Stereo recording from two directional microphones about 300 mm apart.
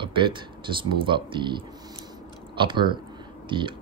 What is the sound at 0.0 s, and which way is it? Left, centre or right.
Speech, centre.